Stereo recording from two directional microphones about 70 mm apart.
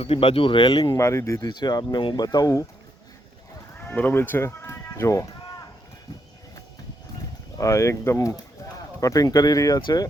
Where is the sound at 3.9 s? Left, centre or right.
Left.